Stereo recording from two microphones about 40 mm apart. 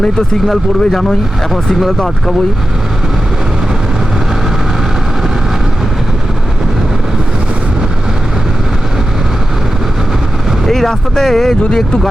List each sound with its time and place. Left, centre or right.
0.4 s speech: centre
10.7 s speech: centre